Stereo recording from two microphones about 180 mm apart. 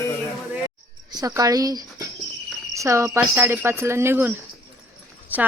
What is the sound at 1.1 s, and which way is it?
A woman's voice, 20° right (ahead or behind).